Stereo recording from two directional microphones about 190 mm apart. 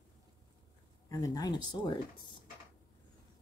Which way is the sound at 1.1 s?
20° left (ahead or behind).